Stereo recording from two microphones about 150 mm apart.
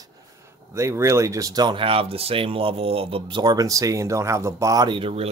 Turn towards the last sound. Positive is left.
turn(degrees=-40)  # may be behind; listen again after turning